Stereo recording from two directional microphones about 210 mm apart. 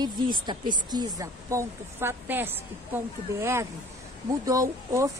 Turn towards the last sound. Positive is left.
turn(degrees=-15)  # may be behind; listen again after turning